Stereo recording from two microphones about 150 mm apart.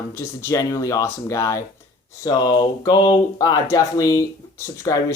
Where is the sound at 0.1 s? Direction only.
20° left (ahead or behind).